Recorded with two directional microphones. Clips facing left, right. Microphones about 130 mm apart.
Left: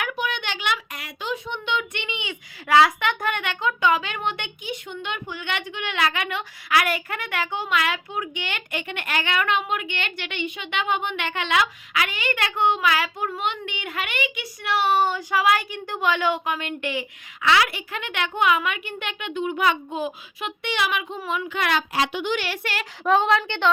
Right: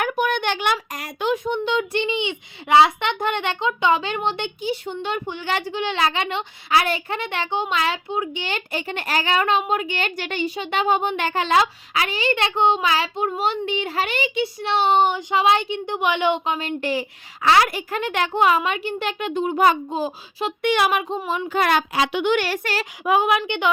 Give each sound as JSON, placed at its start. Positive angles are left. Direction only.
{"t": 0.0, "sound": "speech", "side_deg": -45}
{"t": 20.6, "sound": "speech", "side_deg": -50}
{"t": 21.8, "sound": "a woman's voice", "side_deg": -60}
{"t": 22.4, "sound": "speech", "side_deg": -40}
{"t": 23.0, "sound": "a woman's voice", "side_deg": -10}